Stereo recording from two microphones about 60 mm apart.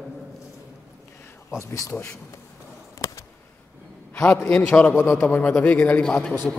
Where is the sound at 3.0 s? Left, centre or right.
Left.